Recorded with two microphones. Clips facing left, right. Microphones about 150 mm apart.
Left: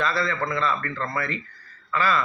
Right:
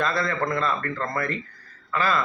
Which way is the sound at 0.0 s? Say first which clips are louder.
Right 1 dB; 50° right (ahead or behind).